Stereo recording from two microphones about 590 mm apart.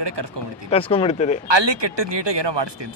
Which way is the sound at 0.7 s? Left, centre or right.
Centre.